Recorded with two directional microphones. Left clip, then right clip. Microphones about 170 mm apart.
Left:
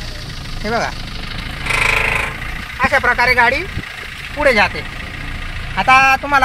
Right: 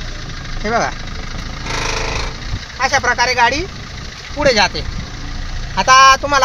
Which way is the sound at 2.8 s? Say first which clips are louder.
Left 1 dB; 50° right (ahead or behind).